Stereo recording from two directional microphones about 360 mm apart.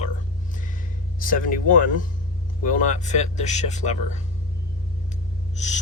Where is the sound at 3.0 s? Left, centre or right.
Centre.